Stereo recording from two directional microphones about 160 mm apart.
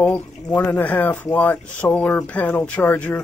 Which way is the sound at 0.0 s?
10° left (ahead or behind).